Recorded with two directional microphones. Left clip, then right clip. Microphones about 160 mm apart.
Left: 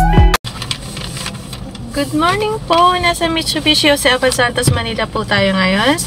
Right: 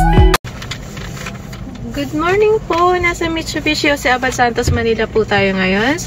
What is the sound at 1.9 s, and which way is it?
Speech, 25° left (ahead or behind).